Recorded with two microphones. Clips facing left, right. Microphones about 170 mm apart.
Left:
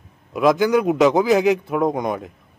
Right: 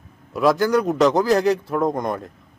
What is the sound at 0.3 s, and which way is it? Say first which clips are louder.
Speech: left 1 dB; centre (ahead or behind).